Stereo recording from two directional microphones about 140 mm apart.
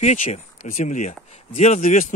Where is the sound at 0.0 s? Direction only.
50° left (ahead or behind).